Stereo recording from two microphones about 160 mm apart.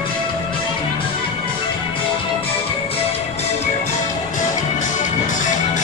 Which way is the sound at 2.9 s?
40° left (ahead or behind).